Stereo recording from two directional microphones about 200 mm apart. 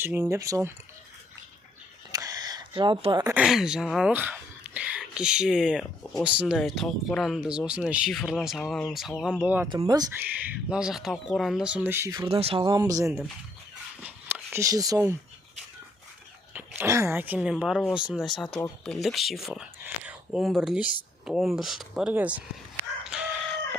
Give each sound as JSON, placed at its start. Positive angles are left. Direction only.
{"t": 0.0, "sound": "speech", "side_deg": -15}
{"t": 2.1, "sound": "a sound", "side_deg": -20}
{"t": 3.3, "sound": "speech", "side_deg": 0}
{"t": 9.6, "sound": "speech", "side_deg": -20}
{"t": 10.7, "sound": "speech", "side_deg": -5}
{"t": 12.3, "sound": "speech", "side_deg": -30}
{"t": 14.0, "sound": "a sound", "side_deg": -10}
{"t": 16.6, "sound": "speech", "side_deg": -10}
{"t": 23.0, "sound": "crowing", "side_deg": -5}